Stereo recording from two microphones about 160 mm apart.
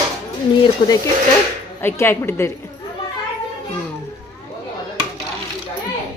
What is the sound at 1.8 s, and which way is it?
Speech, 15° left (ahead or behind).